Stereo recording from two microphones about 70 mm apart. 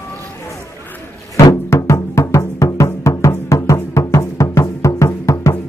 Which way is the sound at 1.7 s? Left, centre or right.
Left.